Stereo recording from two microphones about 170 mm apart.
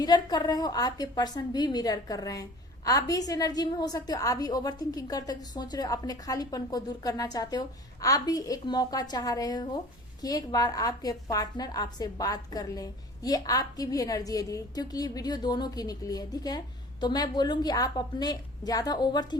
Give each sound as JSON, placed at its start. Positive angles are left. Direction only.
{"t": 0.0, "sound": "a woman's voice", "side_deg": 25}